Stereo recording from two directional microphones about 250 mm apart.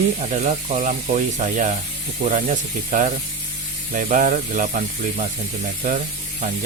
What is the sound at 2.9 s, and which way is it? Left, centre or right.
Speech, right.